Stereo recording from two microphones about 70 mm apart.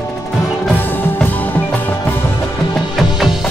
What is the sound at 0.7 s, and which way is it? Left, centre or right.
Music, left.